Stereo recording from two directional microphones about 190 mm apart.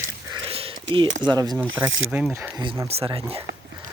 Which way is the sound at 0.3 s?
25° right (ahead or behind).